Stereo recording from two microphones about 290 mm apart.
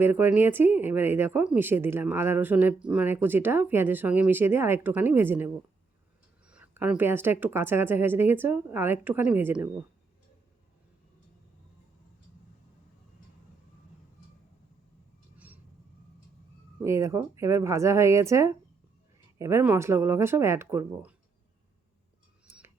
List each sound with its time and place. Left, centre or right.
0.0 s speech: centre
6.5 s speech: centre
16.8 s speech: centre
22.4 s a sound: centre